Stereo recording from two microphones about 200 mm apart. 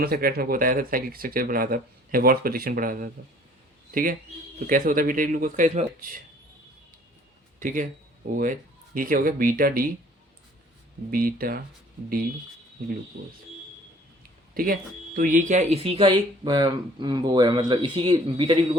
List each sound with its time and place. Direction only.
0.0 s speech: 50° right (ahead or behind)
7.6 s speech: 40° right (ahead or behind)
9.0 s speech: 45° right (ahead or behind)
11.1 s speech: 45° right (ahead or behind)
14.5 s speech: 45° right (ahead or behind); by 18.8 s 25° right (ahead or behind)